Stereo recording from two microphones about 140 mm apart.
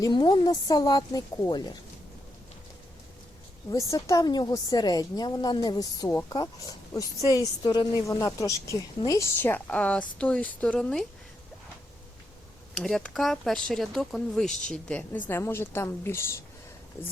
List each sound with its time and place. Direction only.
0.0 s a woman's voice: 30° left (ahead or behind)
3.7 s a woman's voice: 25° left (ahead or behind); by 11.0 s 5° left (ahead or behind)
12.7 s a woman's voice: 5° left (ahead or behind)